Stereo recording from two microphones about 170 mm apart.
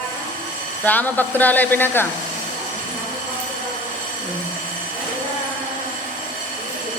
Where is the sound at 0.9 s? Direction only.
10° left (ahead or behind).